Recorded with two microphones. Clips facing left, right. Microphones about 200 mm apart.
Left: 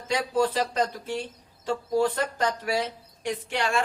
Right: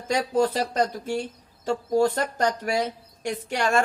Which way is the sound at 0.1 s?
45° right (ahead or behind).